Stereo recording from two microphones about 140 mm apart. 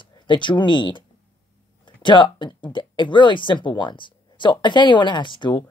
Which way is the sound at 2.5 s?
35° left (ahead or behind).